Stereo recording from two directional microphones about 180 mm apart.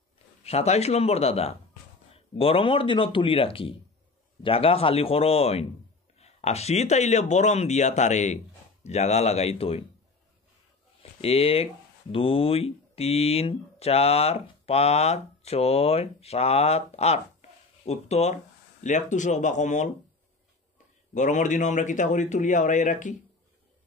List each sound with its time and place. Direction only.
0.4 s speech: 35° left (ahead or behind)
11.0 s a man's voice: 35° left (ahead or behind)